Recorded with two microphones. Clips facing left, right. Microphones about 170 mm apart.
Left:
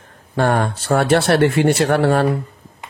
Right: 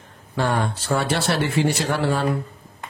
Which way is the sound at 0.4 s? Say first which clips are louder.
Left 5 dB; 55° left (ahead or behind).